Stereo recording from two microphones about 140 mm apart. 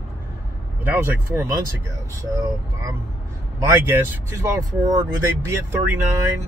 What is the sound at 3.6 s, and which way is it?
Speech, 15° right (ahead or behind).